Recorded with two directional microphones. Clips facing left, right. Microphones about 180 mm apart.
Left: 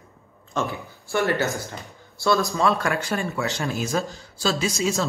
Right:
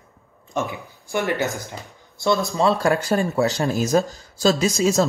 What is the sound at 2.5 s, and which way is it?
Speech, 35° right (ahead or behind).